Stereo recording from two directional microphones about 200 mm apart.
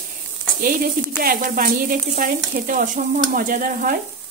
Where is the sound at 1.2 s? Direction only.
50° right (ahead or behind).